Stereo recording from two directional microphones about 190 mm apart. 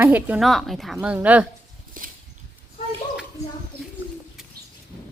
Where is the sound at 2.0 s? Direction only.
45° right (ahead or behind).